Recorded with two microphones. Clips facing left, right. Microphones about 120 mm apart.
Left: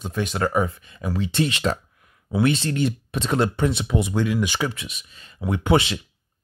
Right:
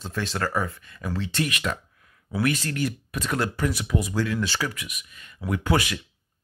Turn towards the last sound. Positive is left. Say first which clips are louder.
# left 4 dB
turn(degrees=25)  # may be behind; listen again after turning